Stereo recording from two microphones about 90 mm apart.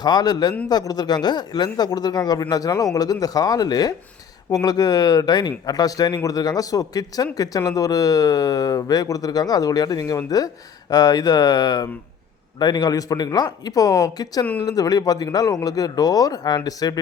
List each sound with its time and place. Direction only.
0.0 s speech: 50° left (ahead or behind)